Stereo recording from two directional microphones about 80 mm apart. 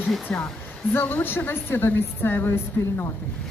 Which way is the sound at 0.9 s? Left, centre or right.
Left.